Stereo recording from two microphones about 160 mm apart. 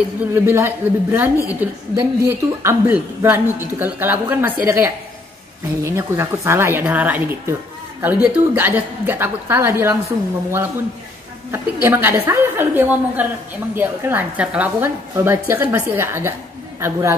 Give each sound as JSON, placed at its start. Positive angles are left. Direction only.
{"t": 0.2, "sound": "a woman's voice", "side_deg": -15}